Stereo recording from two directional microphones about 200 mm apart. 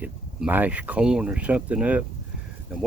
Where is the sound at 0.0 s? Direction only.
10° right (ahead or behind).